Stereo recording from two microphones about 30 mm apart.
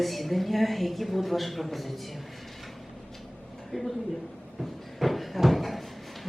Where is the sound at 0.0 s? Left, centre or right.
Centre.